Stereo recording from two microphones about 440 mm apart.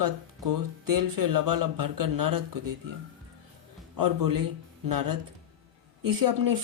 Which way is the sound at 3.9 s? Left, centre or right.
Right.